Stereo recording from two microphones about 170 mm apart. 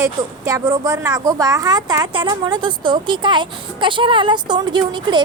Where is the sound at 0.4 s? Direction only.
20° right (ahead or behind).